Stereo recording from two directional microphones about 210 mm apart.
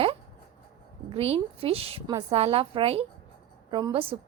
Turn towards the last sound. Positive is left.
turn(degrees=-20)  # may be behind; listen again after turning